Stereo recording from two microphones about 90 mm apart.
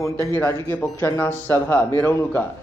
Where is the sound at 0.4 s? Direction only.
20° left (ahead or behind).